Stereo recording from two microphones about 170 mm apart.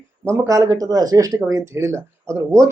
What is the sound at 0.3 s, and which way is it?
Speech, 15° right (ahead or behind).